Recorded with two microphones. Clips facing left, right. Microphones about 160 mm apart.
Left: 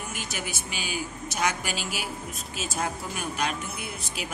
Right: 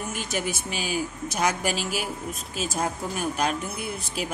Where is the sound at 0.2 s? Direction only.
35° right (ahead or behind).